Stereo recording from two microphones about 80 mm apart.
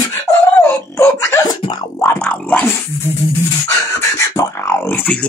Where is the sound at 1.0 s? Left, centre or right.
Left.